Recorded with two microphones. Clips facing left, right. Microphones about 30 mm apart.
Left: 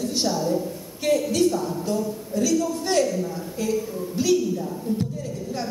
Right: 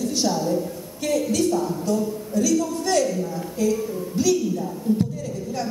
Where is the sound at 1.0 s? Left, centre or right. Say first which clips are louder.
Left 1 dB; left.